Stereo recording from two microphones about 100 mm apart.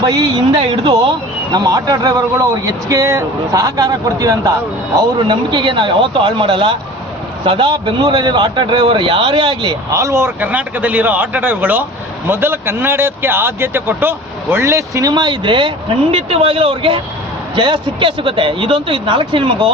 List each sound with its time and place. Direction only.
0.0 s a man's voice: 35° right (ahead or behind)
1.5 s a man's voice: 40° right (ahead or behind)
5.3 s a man's voice: 50° right (ahead or behind)
9.9 s speech: 30° right (ahead or behind)
10.5 s speech: 15° right (ahead or behind); by 15.1 s 35° right (ahead or behind)
15.1 s a man's voice: 50° right (ahead or behind)